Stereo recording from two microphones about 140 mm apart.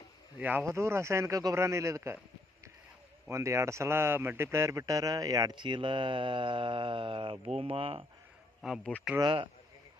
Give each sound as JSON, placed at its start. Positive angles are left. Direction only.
{"t": 0.3, "sound": "a man's voice", "side_deg": -10}
{"t": 3.2, "sound": "speech", "side_deg": -20}
{"t": 8.6, "sound": "speech", "side_deg": 0}
{"t": 9.2, "sound": "speech", "side_deg": -35}